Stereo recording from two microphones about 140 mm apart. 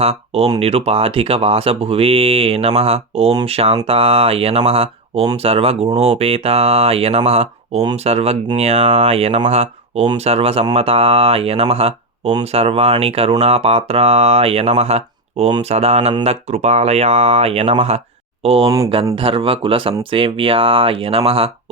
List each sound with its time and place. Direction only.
0.0 s speech: 45° right (ahead or behind)